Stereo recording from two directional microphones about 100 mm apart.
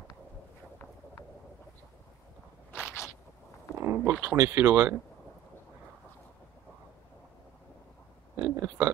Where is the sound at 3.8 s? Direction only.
20° right (ahead or behind).